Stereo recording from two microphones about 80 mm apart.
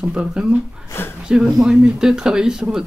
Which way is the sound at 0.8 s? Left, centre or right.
Left.